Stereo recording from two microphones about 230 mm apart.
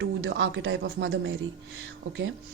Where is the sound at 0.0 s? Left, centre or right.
Right.